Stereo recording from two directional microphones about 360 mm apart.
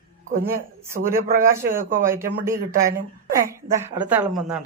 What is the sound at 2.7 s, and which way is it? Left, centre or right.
Speech, right.